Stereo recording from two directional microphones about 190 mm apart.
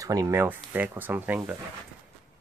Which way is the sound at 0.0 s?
20° right (ahead or behind).